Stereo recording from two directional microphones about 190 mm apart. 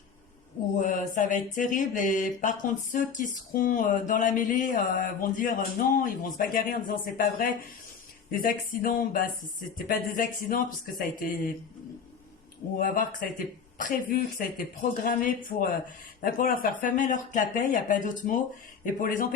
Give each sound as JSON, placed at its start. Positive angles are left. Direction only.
{"t": 0.8, "sound": "speech", "side_deg": 40}
{"t": 12.7, "sound": "speech", "side_deg": 45}